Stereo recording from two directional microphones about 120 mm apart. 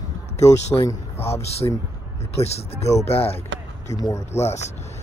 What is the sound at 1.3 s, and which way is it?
Speech, 60° left (ahead or behind).